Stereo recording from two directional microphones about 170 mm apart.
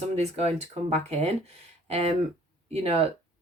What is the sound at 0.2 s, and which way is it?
Speech, 40° right (ahead or behind).